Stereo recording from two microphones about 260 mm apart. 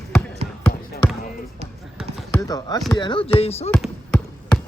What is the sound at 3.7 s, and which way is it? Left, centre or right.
Basketball bounce, centre.